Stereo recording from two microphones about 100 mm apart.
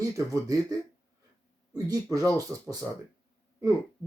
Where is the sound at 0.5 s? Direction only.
40° right (ahead or behind).